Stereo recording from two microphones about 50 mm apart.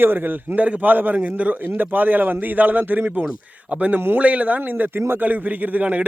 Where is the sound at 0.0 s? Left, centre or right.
Right.